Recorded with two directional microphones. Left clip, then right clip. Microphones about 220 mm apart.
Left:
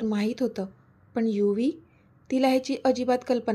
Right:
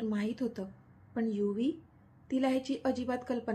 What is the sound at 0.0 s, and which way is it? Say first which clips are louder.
Speech: left 8 dB; 35° left (ahead or behind).